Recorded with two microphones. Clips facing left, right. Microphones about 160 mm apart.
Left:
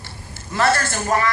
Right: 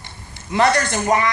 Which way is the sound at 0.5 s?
20° right (ahead or behind).